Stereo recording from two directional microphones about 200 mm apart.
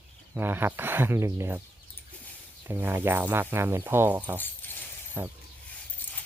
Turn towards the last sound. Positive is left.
turn(degrees=-10)  # may be behind; listen again after turning